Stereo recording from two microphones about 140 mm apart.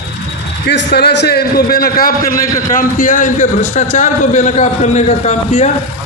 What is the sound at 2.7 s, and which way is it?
A man's voice, 75° left (ahead or behind).